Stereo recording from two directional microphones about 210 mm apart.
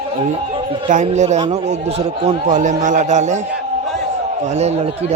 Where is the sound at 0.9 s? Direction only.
35° right (ahead or behind).